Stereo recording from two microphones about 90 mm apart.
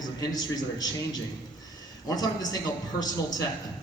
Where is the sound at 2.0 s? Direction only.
45° left (ahead or behind).